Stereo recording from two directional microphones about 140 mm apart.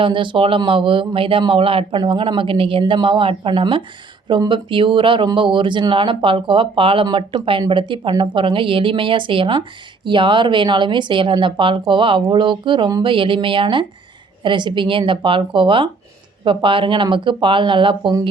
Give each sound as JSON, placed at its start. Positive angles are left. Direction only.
{"t": 0.0, "sound": "speech", "side_deg": -35}